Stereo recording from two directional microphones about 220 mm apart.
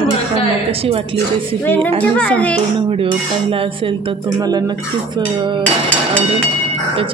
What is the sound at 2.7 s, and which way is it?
Dishes, 25° right (ahead or behind).